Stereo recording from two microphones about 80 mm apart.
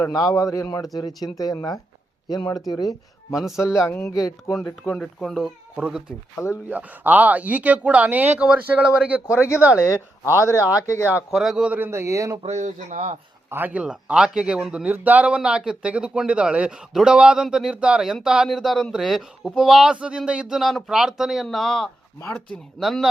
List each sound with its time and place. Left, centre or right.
0.1 s speech: left
3.3 s speech: centre
3.6 s speech: left
4.9 s speech: left
5.2 s speech: centre
5.7 s speech: centre
10.5 s speech: left
11.3 s speech: centre
11.8 s a man's voice: right
13.5 s speech: right; by 23.0 s centre